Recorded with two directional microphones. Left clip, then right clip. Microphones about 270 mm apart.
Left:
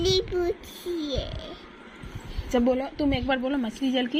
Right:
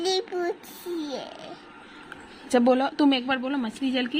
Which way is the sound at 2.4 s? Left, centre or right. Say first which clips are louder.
Right 3 dB; right.